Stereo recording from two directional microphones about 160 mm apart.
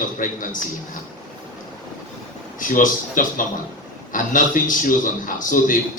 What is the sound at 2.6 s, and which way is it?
A man's voice, 55° left (ahead or behind).